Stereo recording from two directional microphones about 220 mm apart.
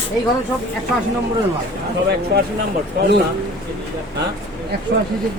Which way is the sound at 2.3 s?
45° right (ahead or behind).